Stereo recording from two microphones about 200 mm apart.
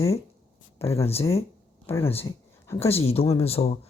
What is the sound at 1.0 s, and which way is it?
Speech, 30° left (ahead or behind).